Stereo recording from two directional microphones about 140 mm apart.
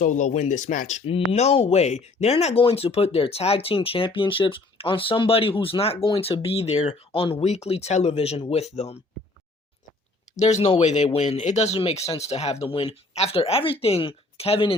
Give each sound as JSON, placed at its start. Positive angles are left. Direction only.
{"t": 0.0, "sound": "speech", "side_deg": 65}
{"t": 10.3, "sound": "speech", "side_deg": 55}